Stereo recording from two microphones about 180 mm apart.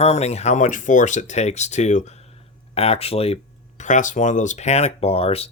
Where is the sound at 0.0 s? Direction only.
35° left (ahead or behind).